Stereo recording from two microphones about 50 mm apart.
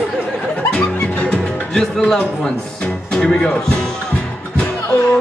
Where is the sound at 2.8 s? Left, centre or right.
Centre.